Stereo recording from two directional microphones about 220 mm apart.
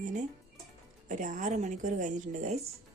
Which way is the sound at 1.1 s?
35° right (ahead or behind).